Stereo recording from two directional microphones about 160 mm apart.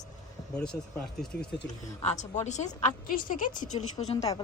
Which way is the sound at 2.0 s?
45° left (ahead or behind).